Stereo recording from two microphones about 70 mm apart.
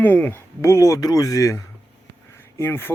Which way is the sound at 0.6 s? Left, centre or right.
Left.